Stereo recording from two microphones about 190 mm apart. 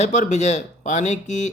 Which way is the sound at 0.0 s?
35° left (ahead or behind).